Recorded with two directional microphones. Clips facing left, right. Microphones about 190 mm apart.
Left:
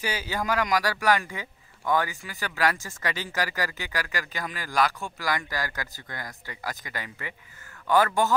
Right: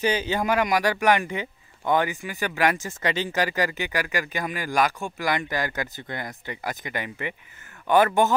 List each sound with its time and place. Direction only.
0.0 s a man's voice: 20° right (ahead or behind)